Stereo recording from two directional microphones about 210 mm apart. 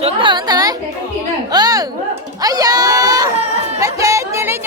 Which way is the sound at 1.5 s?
20° right (ahead or behind).